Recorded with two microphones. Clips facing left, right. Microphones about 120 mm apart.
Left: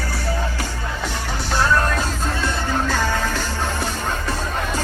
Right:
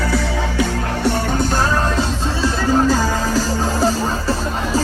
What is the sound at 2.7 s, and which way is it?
Music, 35° right (ahead or behind).